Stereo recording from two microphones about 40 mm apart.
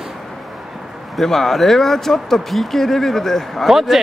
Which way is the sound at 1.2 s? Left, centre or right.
Centre.